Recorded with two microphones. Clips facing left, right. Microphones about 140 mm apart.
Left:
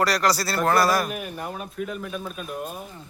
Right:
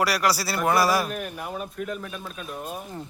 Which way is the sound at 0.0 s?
10° right (ahead or behind).